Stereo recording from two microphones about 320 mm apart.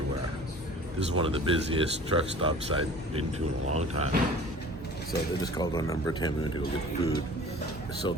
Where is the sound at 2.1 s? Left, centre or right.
Centre.